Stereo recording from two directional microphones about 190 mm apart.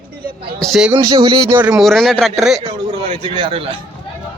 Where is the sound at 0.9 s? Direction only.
20° right (ahead or behind).